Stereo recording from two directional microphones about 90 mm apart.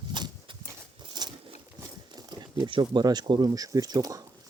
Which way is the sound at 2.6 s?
60° right (ahead or behind).